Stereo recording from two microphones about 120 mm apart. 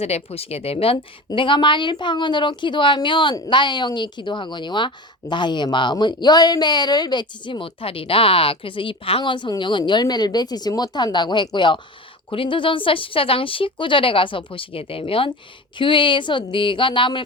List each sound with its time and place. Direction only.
0.0 s speech: 60° left (ahead or behind)
1.3 s speech: 40° left (ahead or behind)